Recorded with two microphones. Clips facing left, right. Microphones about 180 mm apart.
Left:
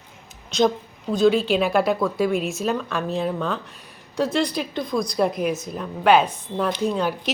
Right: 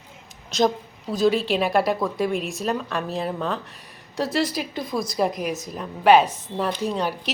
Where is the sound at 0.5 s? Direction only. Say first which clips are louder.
Left 1 dB; centre (ahead or behind).